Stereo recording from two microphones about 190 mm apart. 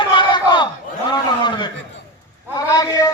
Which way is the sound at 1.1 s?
25° left (ahead or behind).